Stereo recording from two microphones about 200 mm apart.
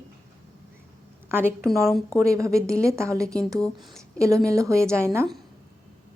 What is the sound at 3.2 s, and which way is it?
Speech, 5° left (ahead or behind).